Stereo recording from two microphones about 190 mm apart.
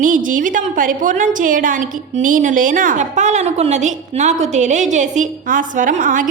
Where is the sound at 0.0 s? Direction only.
45° right (ahead or behind).